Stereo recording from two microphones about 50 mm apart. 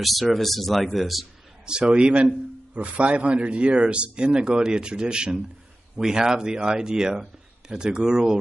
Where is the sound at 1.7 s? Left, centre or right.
Centre.